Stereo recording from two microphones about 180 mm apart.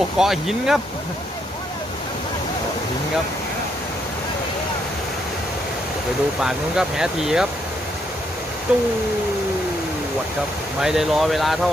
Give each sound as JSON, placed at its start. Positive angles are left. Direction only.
{"t": 0.2, "sound": "speech", "side_deg": 0}
{"t": 6.4, "sound": "speech", "side_deg": -5}
{"t": 8.7, "sound": "speech", "side_deg": -5}
{"t": 10.8, "sound": "speech", "side_deg": 0}